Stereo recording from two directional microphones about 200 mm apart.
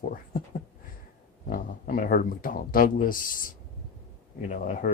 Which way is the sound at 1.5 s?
45° left (ahead or behind).